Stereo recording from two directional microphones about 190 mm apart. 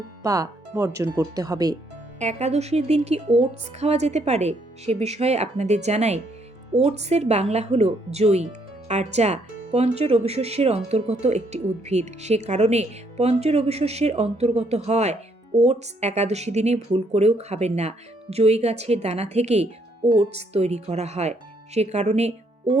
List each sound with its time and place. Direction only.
0.2 s speech: 15° right (ahead or behind)
2.1 s speech: 35° right (ahead or behind)